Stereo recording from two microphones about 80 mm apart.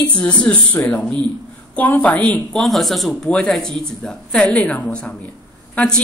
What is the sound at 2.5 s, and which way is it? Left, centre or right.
Speech, centre.